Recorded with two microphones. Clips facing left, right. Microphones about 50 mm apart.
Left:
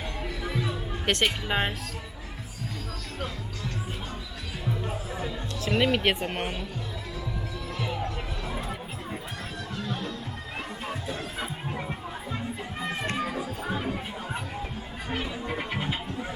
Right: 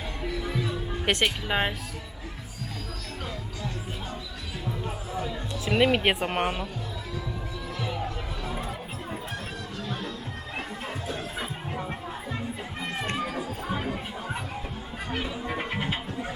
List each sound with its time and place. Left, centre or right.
0.0 s music: centre
1.0 s speech: centre
3.2 s music: centre
7.8 s music: centre